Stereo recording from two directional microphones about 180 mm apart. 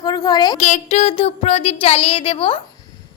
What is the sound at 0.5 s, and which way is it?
A woman's voice, 40° left (ahead or behind).